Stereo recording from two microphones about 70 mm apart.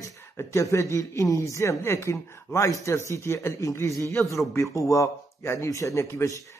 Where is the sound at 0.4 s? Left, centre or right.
Left.